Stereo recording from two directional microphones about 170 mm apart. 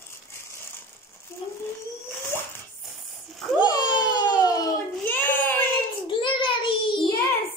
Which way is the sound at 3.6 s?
25° left (ahead or behind).